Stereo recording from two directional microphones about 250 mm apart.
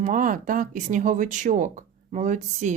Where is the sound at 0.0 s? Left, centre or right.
Right.